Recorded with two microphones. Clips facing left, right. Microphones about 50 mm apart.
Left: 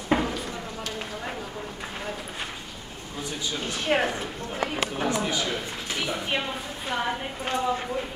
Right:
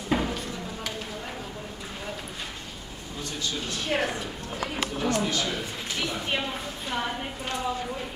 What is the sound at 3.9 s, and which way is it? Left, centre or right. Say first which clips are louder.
Speech: left 3 dB; left.